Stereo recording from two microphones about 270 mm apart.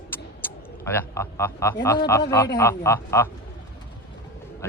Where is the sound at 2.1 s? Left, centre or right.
Centre.